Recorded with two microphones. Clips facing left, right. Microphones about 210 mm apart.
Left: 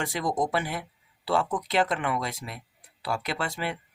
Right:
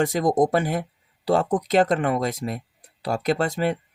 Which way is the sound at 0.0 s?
45° right (ahead or behind).